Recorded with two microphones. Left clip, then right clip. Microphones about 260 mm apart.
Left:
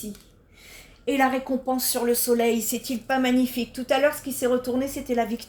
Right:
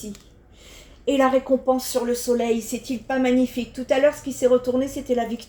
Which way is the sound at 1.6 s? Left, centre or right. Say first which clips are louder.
Right 3 dB; left.